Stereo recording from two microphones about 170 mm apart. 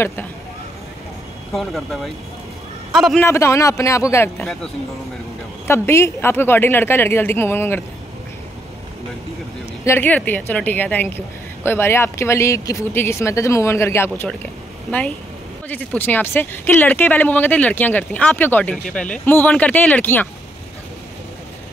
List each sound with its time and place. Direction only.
0.0 s speech: 15° left (ahead or behind)
1.5 s a man's voice: centre (ahead or behind)
3.3 s speech: 15° left (ahead or behind)
5.7 s speech: 15° left (ahead or behind)
9.8 s speech: 10° left (ahead or behind)